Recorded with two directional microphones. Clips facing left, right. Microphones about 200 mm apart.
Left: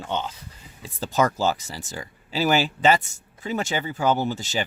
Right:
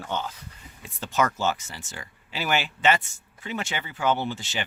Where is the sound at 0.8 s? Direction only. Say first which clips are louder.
Left 3 dB; 35° left (ahead or behind).